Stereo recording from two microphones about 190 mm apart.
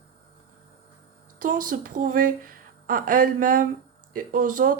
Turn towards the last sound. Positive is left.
turn(degrees=-45)  # may be behind; listen again after turning